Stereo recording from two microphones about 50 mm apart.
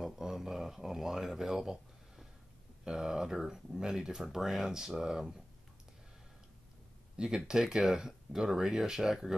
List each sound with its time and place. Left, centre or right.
0.0 s a sound: centre
2.8 s speech: centre
7.2 s speech: centre